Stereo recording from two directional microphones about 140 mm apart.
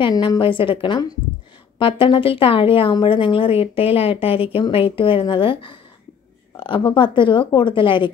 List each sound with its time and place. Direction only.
0.0 s speech: 30° left (ahead or behind)